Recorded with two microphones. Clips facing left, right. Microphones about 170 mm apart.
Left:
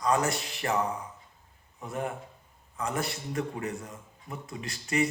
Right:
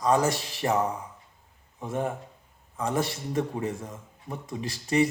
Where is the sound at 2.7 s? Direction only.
30° right (ahead or behind).